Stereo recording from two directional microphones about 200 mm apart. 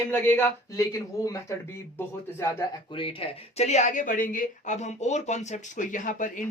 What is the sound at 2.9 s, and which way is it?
Speech, 25° left (ahead or behind).